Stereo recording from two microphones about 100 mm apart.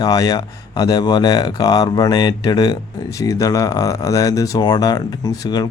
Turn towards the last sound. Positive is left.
turn(degrees=40)  # may be behind; listen again after turning